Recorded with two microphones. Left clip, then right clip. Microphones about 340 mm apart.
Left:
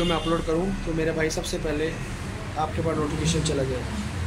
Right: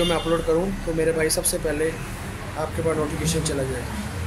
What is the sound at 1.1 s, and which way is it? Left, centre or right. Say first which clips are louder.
Speech: right 3 dB; centre.